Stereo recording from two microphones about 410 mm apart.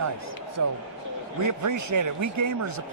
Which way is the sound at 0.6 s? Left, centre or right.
Right.